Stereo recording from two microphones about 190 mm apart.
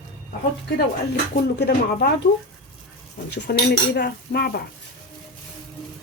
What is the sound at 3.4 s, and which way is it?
Speech, 55° left (ahead or behind).